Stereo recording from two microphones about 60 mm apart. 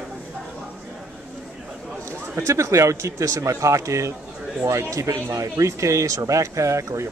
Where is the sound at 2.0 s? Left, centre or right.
Right.